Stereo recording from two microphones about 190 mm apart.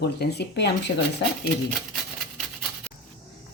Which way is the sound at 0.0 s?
60° left (ahead or behind).